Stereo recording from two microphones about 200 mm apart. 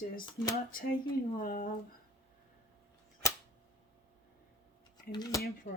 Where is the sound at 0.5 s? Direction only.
45° left (ahead or behind).